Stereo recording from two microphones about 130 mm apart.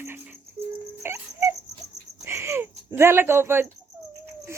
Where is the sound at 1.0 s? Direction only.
20° right (ahead or behind).